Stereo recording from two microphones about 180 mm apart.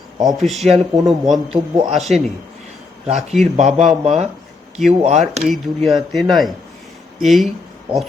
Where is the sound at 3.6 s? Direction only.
40° right (ahead or behind).